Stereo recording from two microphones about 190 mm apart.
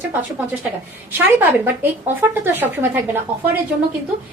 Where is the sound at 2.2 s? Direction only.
10° right (ahead or behind).